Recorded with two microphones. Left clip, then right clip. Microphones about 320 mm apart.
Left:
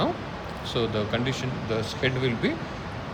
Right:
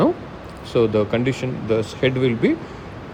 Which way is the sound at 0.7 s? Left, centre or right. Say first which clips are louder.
Right 9 dB; centre.